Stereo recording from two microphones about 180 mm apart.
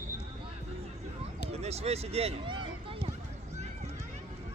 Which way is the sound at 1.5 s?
35° right (ahead or behind).